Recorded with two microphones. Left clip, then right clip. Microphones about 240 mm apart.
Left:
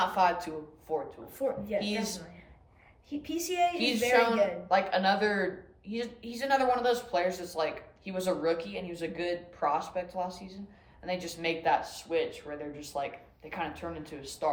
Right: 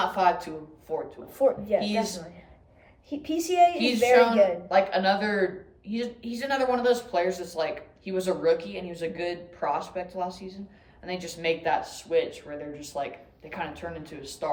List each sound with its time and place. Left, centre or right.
0.0 s speech: centre
1.3 s a woman's voice: centre
1.8 s speech: centre
3.1 s a woman's voice: centre
3.8 s speech: centre